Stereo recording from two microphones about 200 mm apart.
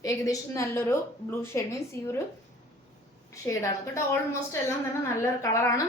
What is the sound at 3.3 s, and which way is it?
Speech, 15° left (ahead or behind).